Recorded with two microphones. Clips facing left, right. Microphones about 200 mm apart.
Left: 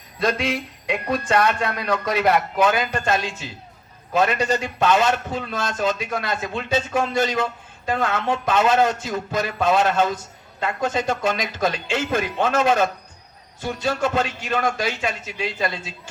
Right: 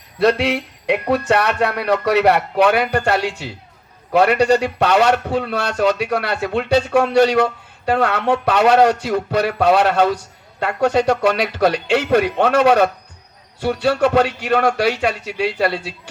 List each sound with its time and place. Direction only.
0.2 s a man's voice: 70° right (ahead or behind)